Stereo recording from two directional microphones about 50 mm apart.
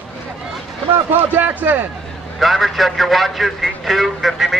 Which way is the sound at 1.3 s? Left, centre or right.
Right.